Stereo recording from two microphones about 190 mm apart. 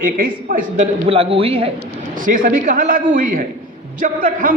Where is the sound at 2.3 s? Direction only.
45° right (ahead or behind).